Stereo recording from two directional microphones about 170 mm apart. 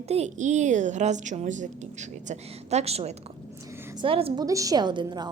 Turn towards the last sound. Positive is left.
turn(degrees=-25)  # may be behind; listen again after turning